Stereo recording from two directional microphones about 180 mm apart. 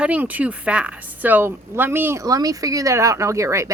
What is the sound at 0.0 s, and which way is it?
A woman's voice, 10° right (ahead or behind).